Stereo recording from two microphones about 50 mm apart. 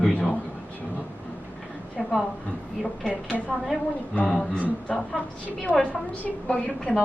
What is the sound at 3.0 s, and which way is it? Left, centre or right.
Speech, left.